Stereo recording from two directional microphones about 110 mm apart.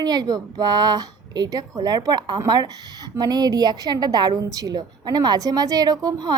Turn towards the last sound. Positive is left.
turn(degrees=-35)  # may be behind; listen again after turning